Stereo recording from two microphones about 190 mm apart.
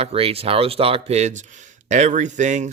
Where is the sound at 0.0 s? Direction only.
30° right (ahead or behind).